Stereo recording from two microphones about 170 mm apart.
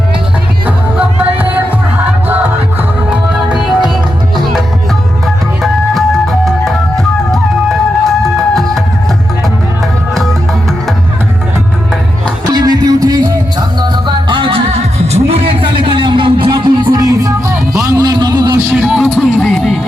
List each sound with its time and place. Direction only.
0.6 s music: 10° right (ahead or behind)
3.1 s music: 5° right (ahead or behind)
6.4 s music: centre (ahead or behind)
12.5 s music: 25° right (ahead or behind)
17.9 s a sound: 25° right (ahead or behind)
18.7 s music: 5° right (ahead or behind)